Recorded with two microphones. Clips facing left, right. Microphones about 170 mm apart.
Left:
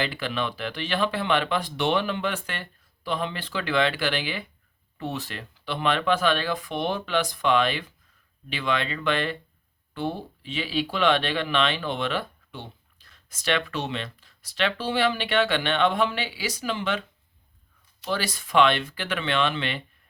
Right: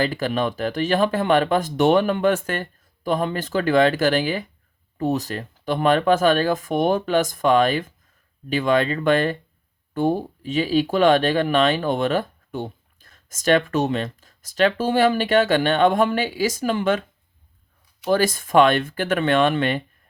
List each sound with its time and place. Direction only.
0.0 s speech: 40° right (ahead or behind)
18.0 s speech: 45° right (ahead or behind)